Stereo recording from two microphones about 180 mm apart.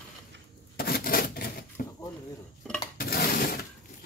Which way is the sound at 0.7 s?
55° left (ahead or behind).